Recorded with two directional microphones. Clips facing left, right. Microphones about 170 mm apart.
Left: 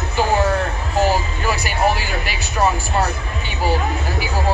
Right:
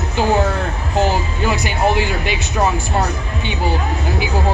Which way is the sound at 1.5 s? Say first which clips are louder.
Right 1 dB; 20° right (ahead or behind).